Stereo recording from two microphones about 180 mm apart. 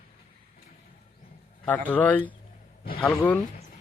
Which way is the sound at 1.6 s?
10° left (ahead or behind).